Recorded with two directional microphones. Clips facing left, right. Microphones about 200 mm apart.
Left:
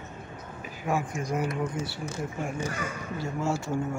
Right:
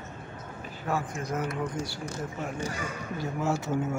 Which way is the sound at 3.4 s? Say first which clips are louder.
Right 1 dB; 20° right (ahead or behind).